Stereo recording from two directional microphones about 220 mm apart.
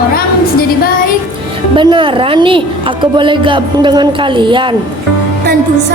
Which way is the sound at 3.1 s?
20° right (ahead or behind).